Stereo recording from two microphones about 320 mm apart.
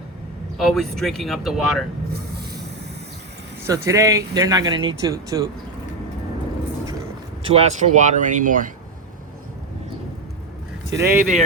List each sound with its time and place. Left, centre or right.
0.5 s speech: centre
3.7 s speech: centre
7.4 s speech: centre
10.9 s speech: centre